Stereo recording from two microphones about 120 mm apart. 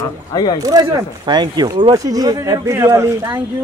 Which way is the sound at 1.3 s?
35° right (ahead or behind).